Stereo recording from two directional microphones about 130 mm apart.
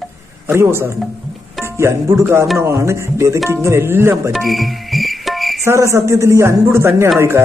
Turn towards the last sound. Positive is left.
turn(degrees=-20)  # may be behind; listen again after turning